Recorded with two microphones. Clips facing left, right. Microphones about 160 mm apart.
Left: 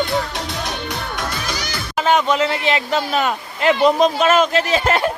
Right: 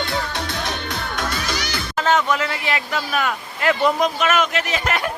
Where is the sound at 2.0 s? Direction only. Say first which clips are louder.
Left 3 dB; 15° left (ahead or behind).